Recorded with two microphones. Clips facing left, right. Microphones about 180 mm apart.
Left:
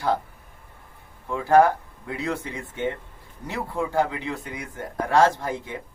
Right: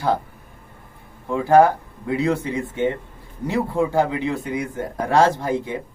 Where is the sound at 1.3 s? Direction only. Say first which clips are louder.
Right 3 dB; 25° right (ahead or behind).